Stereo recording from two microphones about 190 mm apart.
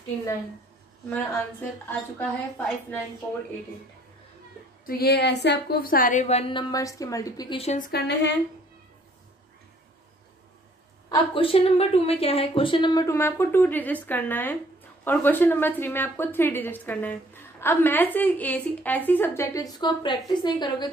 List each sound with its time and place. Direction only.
1.1 s a woman's voice: 10° left (ahead or behind)
4.8 s speech: 55° left (ahead or behind); by 6.6 s 30° left (ahead or behind)
6.7 s a woman's voice: 15° left (ahead or behind)
7.9 s speech: 60° left (ahead or behind)
11.1 s a woman's voice: 30° left (ahead or behind)